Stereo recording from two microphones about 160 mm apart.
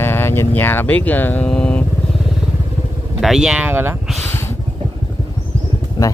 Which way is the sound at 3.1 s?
5° right (ahead or behind).